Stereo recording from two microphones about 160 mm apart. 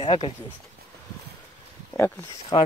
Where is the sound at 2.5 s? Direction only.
35° left (ahead or behind).